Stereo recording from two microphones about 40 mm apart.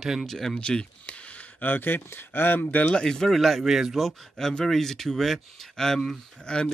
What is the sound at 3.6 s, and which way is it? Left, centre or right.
Speech, centre.